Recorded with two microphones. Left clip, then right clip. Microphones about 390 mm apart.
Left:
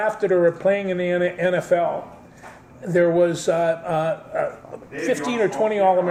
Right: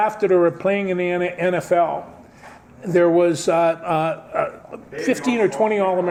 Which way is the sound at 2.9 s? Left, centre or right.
Right.